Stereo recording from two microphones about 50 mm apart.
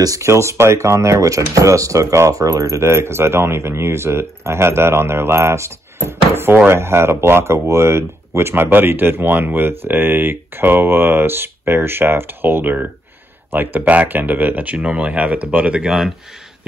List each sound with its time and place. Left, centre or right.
0.2 s speech: right
6.8 s speech: right
8.6 s speech: right